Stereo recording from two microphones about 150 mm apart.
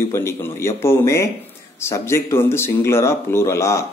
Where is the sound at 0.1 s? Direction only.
15° left (ahead or behind).